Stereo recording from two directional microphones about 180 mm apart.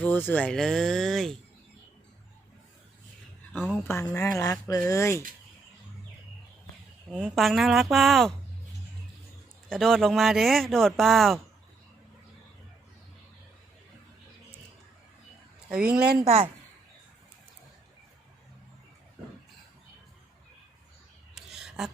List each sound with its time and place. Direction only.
0.0 s speech: 10° left (ahead or behind)
3.8 s speech: 15° left (ahead or behind)
7.2 s speech: centre (ahead or behind)
9.6 s speech: centre (ahead or behind)
15.7 s speech: 5° right (ahead or behind)
16.2 s a woman's voice: 35° right (ahead or behind)
21.3 s a sound: 5° right (ahead or behind)